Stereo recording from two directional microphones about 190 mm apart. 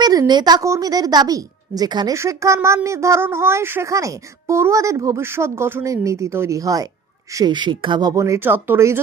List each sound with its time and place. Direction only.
0.0 s a woman's voice: 20° right (ahead or behind)